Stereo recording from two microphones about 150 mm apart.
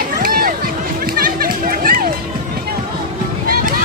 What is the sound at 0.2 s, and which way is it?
Music, 70° right (ahead or behind).